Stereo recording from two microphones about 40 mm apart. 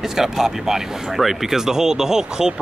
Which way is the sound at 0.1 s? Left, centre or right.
Centre.